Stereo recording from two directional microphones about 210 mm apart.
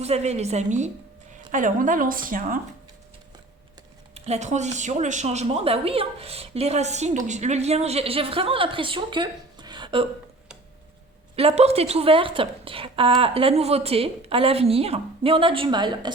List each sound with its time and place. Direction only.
0.0 s speech: 30° right (ahead or behind)
4.1 s a woman's voice: 30° right (ahead or behind)
11.3 s a woman's voice: 30° right (ahead or behind)